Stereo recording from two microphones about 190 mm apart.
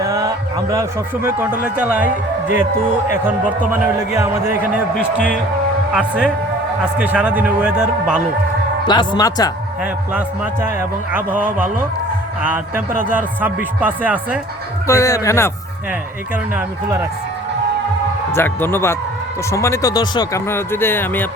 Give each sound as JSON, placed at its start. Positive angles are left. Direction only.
{"t": 0.0, "sound": "a man's voice", "side_deg": -20}
{"t": 3.7, "sound": "a man's voice", "side_deg": -15}
{"t": 5.9, "sound": "a man's voice", "side_deg": -5}
{"t": 8.9, "sound": "speech", "side_deg": 20}
{"t": 9.8, "sound": "a man's voice", "side_deg": -10}
{"t": 14.8, "sound": "speech", "side_deg": 15}
{"t": 16.6, "sound": "a man's voice", "side_deg": -15}
{"t": 18.3, "sound": "speech", "side_deg": 10}